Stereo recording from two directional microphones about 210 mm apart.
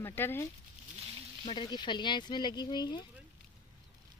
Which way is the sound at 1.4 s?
20° left (ahead or behind).